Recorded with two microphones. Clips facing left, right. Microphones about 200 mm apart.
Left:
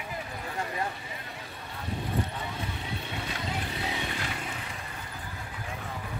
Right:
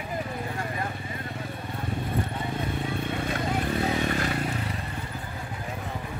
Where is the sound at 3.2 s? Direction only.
50° right (ahead or behind).